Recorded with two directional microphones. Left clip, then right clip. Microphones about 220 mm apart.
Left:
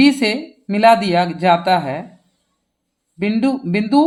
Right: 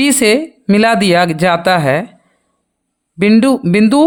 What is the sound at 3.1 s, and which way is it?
Speech, 50° right (ahead or behind).